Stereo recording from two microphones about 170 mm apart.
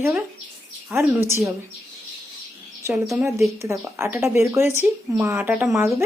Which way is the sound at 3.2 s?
15° right (ahead or behind).